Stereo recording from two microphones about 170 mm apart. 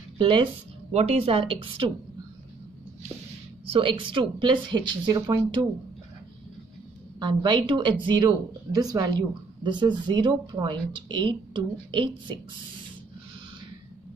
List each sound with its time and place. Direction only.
0.2 s a woman's voice: 30° right (ahead or behind)
3.7 s a woman's voice: 30° right (ahead or behind)
7.2 s a woman's voice: 25° right (ahead or behind)